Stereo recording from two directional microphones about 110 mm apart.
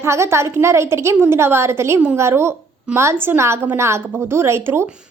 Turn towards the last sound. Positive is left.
turn(degrees=-25)  # may be behind; listen again after turning